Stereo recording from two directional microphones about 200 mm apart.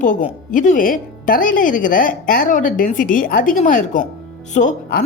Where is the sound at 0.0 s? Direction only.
40° left (ahead or behind).